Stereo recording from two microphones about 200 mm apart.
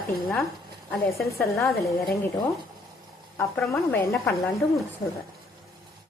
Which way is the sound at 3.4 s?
10° left (ahead or behind).